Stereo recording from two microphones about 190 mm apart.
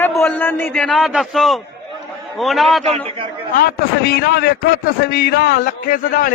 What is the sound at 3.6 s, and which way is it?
A man's voice, 55° left (ahead or behind).